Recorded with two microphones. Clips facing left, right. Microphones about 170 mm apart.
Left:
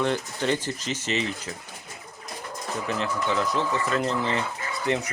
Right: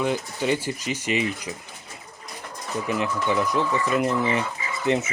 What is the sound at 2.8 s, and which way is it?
Speech, 15° right (ahead or behind).